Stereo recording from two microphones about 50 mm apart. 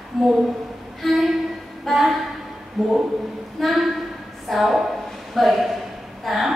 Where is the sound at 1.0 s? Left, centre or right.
Centre.